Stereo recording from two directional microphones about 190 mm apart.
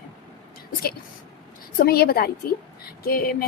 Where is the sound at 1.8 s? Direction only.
55° left (ahead or behind).